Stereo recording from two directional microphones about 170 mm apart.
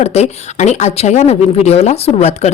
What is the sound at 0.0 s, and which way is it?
Speech, 40° left (ahead or behind).